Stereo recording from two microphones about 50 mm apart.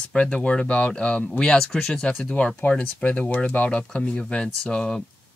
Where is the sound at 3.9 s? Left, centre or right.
Centre.